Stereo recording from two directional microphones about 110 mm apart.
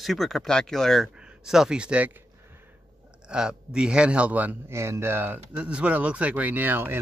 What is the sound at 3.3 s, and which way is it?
Speech, 5° right (ahead or behind).